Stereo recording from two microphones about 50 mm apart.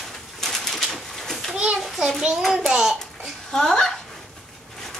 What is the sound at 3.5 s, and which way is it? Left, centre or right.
Speech, centre.